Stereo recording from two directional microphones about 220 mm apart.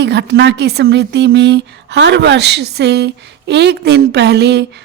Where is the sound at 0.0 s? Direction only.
50° right (ahead or behind).